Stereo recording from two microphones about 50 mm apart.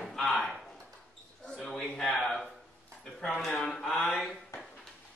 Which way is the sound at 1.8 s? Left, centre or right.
Centre.